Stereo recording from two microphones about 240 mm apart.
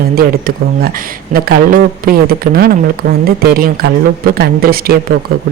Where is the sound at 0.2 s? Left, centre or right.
Right.